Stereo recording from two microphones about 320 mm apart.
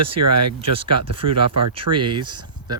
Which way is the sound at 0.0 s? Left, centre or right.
Right.